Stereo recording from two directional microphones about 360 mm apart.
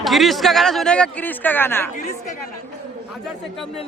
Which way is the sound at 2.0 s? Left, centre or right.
Left.